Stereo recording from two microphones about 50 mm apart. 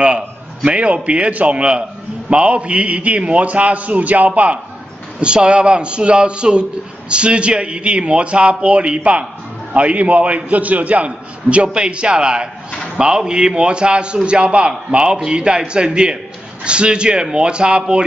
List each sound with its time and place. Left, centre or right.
0.7 s a man's voice: right
5.2 s a man's voice: centre